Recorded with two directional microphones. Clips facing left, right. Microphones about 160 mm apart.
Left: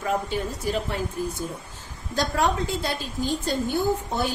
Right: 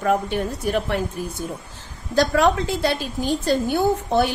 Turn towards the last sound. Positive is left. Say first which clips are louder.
# right 6 dB
turn(degrees=-75)  # may be behind; listen again after turning